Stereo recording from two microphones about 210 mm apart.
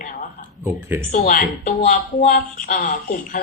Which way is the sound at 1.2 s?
40° left (ahead or behind).